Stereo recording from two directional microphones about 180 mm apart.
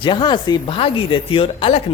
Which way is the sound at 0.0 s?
25° left (ahead or behind).